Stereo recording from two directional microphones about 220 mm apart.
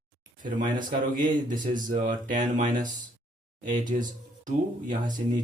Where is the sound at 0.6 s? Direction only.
40° right (ahead or behind).